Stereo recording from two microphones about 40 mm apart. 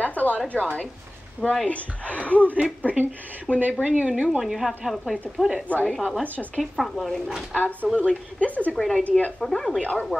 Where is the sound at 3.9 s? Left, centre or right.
Right.